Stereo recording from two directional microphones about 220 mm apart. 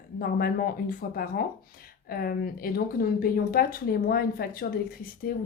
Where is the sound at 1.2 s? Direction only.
40° left (ahead or behind).